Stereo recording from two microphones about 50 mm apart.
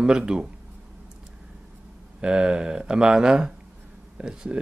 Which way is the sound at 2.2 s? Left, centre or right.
Centre.